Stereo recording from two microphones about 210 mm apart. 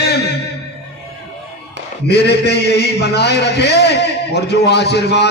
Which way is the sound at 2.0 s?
50° left (ahead or behind).